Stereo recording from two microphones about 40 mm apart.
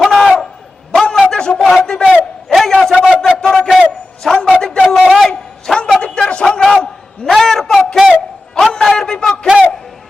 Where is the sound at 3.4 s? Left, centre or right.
Centre.